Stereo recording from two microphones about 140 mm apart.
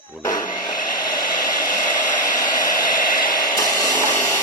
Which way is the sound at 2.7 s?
75° left (ahead or behind).